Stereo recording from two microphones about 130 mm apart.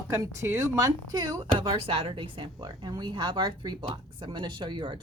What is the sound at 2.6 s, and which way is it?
Speech, 30° right (ahead or behind).